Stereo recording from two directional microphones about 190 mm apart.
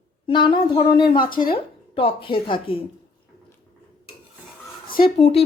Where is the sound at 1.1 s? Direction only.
50° left (ahead or behind).